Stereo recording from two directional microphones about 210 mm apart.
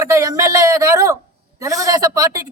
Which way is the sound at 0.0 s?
15° right (ahead or behind).